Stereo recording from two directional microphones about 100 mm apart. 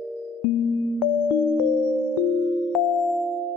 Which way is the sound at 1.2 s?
15° right (ahead or behind).